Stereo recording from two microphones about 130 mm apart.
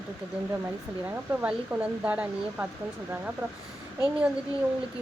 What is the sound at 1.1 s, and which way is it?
Speech, 10° right (ahead or behind).